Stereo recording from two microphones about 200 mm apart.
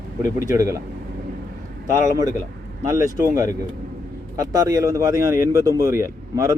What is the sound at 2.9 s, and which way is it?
Speech, 15° right (ahead or behind).